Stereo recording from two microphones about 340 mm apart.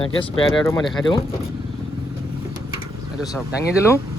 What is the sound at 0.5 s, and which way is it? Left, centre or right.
Speech, centre.